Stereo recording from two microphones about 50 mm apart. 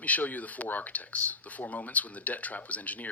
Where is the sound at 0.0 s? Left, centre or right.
Left.